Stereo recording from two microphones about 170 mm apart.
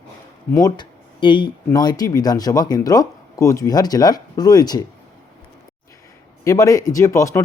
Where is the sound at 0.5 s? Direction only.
25° left (ahead or behind).